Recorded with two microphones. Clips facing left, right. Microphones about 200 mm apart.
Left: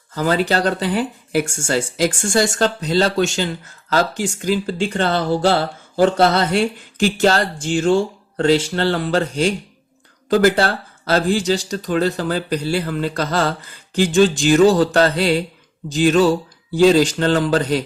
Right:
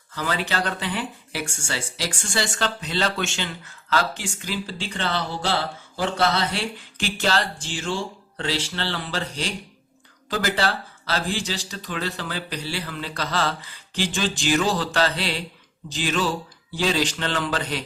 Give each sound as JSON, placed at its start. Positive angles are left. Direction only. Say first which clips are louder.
{"t": 0.1, "sound": "speech", "louder": "left 9 dB", "side_deg": 45}